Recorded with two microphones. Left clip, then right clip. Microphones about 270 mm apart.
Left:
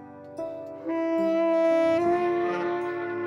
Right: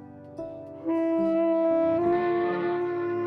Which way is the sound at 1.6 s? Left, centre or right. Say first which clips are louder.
Left 1 dB; left.